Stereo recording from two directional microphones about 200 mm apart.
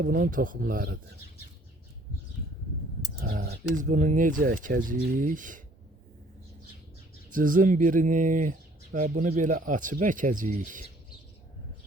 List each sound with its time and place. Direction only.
0.0 s speech: 45° right (ahead or behind)
3.2 s speech: 50° right (ahead or behind)
7.3 s speech: 40° right (ahead or behind)